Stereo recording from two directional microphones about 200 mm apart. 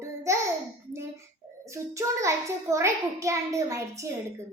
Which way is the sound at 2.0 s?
15° right (ahead or behind).